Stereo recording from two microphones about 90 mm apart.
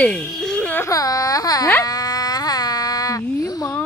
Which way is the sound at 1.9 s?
45° left (ahead or behind).